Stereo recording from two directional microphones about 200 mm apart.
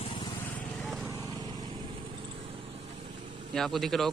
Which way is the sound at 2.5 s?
30° right (ahead or behind).